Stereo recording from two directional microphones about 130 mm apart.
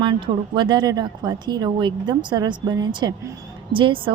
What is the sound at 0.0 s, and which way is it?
A woman's voice, 35° right (ahead or behind).